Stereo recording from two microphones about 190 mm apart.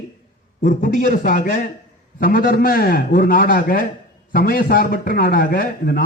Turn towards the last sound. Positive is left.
turn(degrees=50)  # may be behind; listen again after turning